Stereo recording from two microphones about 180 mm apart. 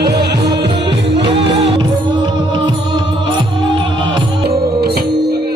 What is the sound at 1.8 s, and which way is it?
Music, 25° right (ahead or behind).